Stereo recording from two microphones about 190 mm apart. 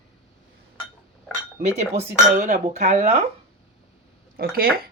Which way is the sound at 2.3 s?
45° right (ahead or behind).